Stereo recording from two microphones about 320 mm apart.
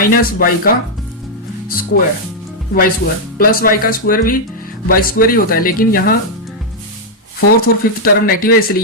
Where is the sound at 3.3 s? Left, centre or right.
Left.